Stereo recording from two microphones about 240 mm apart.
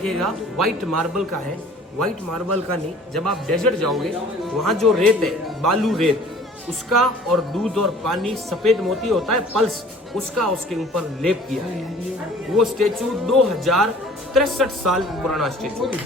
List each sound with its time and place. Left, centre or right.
0.0 s speech: centre
3.2 s speech: centre
12.5 s speech: centre